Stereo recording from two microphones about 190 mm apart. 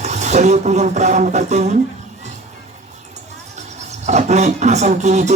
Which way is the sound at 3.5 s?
35° right (ahead or behind).